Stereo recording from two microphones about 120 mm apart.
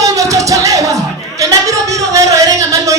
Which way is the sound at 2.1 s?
25° right (ahead or behind).